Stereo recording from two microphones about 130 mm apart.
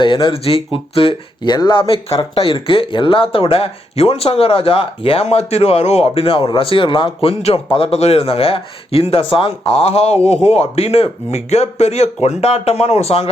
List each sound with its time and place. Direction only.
0.0 s speech: 40° left (ahead or behind)